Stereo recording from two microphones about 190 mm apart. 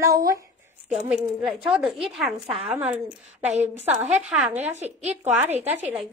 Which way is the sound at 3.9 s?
35° right (ahead or behind).